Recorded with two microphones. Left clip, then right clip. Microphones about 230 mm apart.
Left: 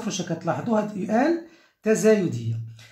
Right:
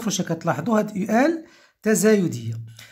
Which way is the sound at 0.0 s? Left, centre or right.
Right.